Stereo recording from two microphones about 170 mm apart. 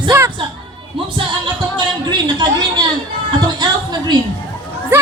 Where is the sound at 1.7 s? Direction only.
25° right (ahead or behind).